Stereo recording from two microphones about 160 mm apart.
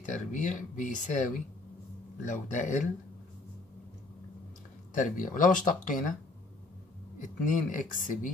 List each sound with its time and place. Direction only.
0.0 s speech: 50° left (ahead or behind)
4.9 s speech: 55° left (ahead or behind)
7.2 s speech: 55° left (ahead or behind)